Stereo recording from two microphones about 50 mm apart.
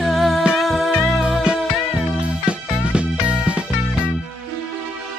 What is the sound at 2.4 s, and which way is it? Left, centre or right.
Music, right.